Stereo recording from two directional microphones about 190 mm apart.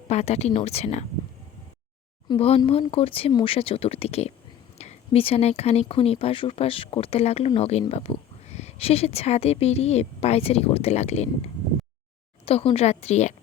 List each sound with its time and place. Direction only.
0.1 s speech: 35° left (ahead or behind)
2.2 s speech: 30° left (ahead or behind)
12.5 s speech: 30° left (ahead or behind)